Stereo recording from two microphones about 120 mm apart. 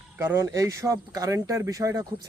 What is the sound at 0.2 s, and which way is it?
Speech, 20° right (ahead or behind).